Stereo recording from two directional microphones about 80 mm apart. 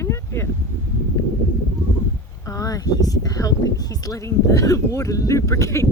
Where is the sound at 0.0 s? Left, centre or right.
Left.